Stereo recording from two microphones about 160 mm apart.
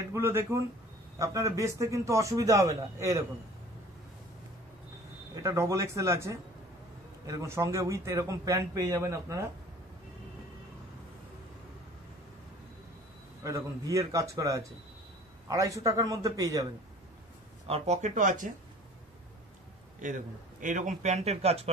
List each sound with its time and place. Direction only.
0.1 s a man's voice: 15° right (ahead or behind)
5.3 s a man's voice: 20° right (ahead or behind)
13.4 s a man's voice: 20° right (ahead or behind)
17.6 s speech: 40° right (ahead or behind)
20.0 s speech: 50° right (ahead or behind)